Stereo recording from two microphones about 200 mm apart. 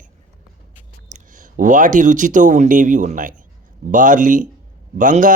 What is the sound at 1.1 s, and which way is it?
A man's voice, 40° right (ahead or behind).